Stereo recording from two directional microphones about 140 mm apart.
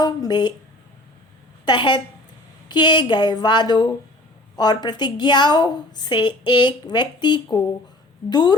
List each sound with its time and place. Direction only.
0.0 s a woman's voice: 30° left (ahead or behind)
1.6 s a woman's voice: 35° left (ahead or behind)